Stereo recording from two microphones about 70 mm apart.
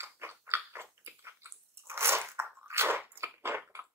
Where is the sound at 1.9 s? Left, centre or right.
Right.